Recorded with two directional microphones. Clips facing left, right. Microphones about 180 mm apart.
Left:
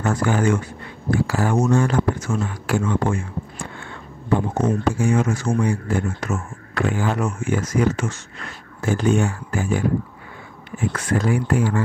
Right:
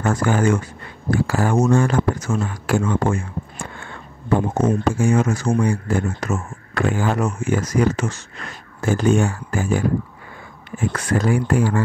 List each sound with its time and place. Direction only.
0.0 s speech: 45° right (ahead or behind)